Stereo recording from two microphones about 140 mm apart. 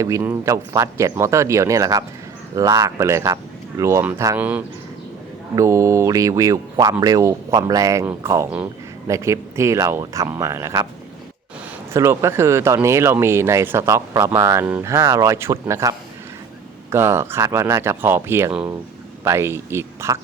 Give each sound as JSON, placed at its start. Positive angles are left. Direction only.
{"t": 0.0, "sound": "speech", "side_deg": -20}
{"t": 4.4, "sound": "speech", "side_deg": -10}
{"t": 11.9, "sound": "speech", "side_deg": -20}